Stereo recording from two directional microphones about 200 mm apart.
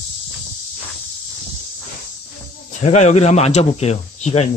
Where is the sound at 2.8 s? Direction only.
35° left (ahead or behind).